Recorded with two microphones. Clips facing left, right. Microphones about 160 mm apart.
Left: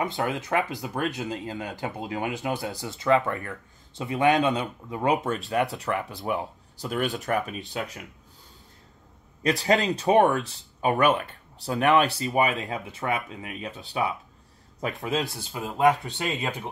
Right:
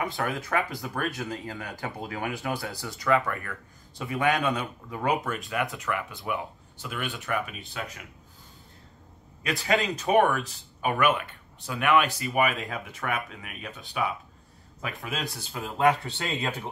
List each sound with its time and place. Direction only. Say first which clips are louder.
0.0 s speech: left 2 dB; 20° left (ahead or behind); by 8.0 s 35° left (ahead or behind)
9.4 s speech: left 4 dB; 35° left (ahead or behind); by 16.6 s 15° left (ahead or behind)